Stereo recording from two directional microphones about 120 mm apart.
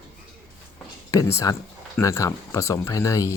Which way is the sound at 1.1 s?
25° left (ahead or behind).